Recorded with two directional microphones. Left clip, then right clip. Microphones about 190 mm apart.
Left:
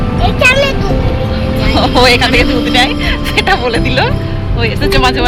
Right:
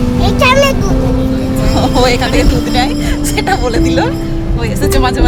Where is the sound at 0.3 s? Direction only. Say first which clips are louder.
Even; 40° right (ahead or behind).